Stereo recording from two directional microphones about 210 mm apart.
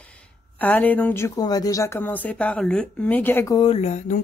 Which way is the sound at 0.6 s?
5° left (ahead or behind).